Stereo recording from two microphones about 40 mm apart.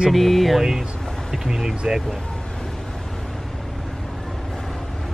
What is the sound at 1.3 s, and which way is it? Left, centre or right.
Speech, centre.